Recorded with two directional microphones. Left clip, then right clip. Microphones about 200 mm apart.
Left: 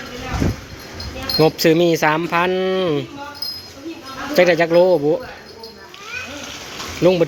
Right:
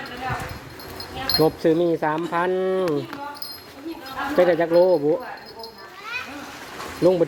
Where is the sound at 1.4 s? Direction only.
10° right (ahead or behind).